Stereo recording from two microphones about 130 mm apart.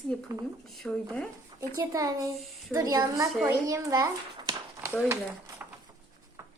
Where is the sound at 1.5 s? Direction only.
25° right (ahead or behind).